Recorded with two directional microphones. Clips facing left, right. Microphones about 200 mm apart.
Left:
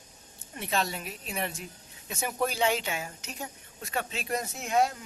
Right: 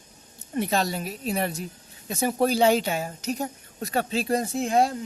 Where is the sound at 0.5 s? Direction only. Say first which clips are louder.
Right 6 dB; 40° right (ahead or behind).